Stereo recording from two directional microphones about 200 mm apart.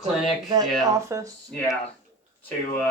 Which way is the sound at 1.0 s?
15° right (ahead or behind).